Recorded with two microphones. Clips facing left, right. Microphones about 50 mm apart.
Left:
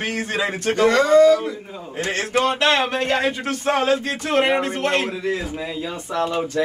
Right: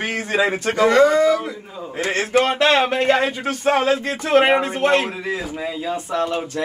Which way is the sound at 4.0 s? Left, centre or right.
Right.